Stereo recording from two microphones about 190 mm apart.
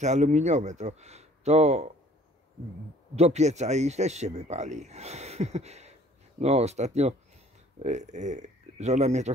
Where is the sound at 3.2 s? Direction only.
35° right (ahead or behind).